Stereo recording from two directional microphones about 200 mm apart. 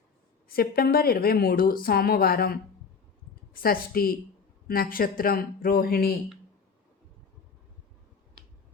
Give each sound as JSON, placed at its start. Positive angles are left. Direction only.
{"t": 0.4, "sound": "a woman's voice", "side_deg": 50}